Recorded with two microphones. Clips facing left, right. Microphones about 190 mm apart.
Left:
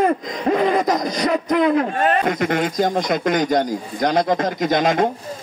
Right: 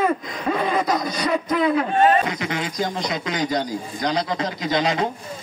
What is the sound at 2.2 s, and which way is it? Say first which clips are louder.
A man's voice: left 7 dB; 50° left (ahead or behind).